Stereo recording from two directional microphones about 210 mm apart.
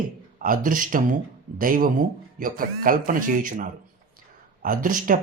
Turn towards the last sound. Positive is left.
turn(degrees=-40)  # may be behind; listen again after turning